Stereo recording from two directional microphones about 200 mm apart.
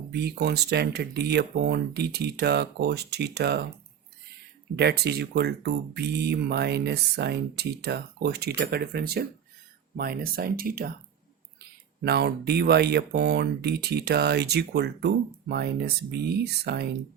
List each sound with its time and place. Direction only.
0.1 s speech: 55° right (ahead or behind)
4.8 s speech: 55° right (ahead or behind)
12.0 s speech: 55° right (ahead or behind)